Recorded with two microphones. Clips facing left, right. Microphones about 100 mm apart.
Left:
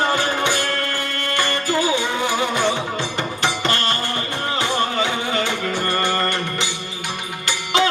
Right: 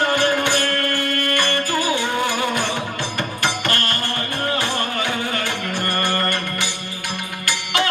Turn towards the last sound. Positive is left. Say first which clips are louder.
# left 2 dB
turn(degrees=20)  # may be behind; listen again after turning